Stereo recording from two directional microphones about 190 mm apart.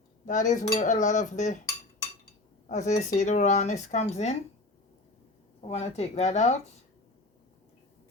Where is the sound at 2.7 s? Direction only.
40° left (ahead or behind).